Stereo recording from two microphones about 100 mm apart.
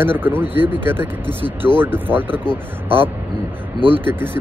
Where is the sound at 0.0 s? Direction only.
20° right (ahead or behind).